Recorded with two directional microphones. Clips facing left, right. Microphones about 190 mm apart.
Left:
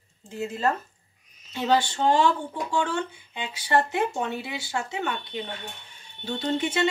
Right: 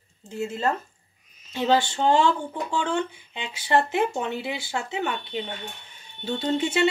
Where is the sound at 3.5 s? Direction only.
25° right (ahead or behind).